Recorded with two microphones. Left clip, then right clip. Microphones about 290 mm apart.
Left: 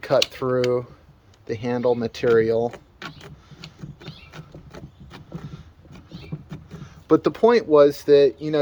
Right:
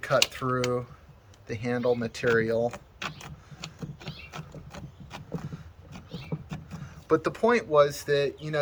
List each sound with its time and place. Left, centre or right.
0.0 s speech: left
2.7 s a sound: centre
6.8 s speech: left